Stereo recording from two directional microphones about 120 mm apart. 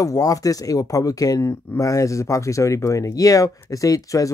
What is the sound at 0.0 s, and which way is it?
Speech, 30° left (ahead or behind).